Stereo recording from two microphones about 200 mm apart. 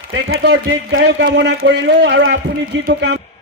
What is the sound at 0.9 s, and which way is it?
A man's voice, 60° right (ahead or behind).